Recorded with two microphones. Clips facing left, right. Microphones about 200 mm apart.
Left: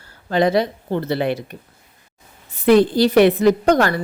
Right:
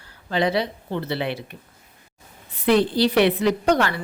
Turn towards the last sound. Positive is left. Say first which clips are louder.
# left 5 dB
turn(degrees=45)  # may be behind; listen again after turning